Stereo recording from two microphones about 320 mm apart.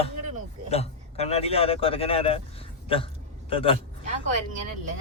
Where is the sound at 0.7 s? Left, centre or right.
Centre.